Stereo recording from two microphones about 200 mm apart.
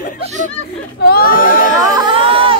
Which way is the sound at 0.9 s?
50° left (ahead or behind).